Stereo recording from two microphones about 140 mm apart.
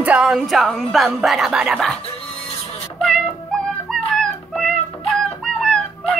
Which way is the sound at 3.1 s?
5° left (ahead or behind).